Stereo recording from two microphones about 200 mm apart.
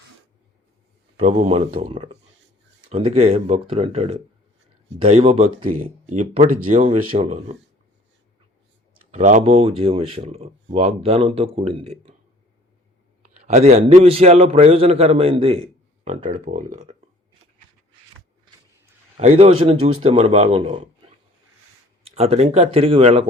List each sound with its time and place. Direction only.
1.2 s a man's voice: 30° right (ahead or behind)
9.1 s speech: 35° right (ahead or behind)
13.2 s a man's voice: 35° right (ahead or behind)
19.1 s a man's voice: 35° right (ahead or behind)
22.0 s a man's voice: 30° right (ahead or behind)